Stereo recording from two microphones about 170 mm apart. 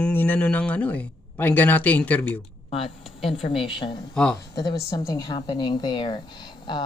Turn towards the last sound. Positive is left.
turn(degrees=25)  # may be behind; listen again after turning